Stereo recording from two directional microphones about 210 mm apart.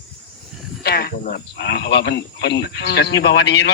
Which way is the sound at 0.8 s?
45° left (ahead or behind).